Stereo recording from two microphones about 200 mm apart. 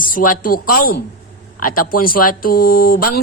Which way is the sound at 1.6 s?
45° left (ahead or behind).